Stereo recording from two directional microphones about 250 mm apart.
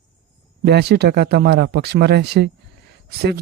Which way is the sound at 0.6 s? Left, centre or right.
Right.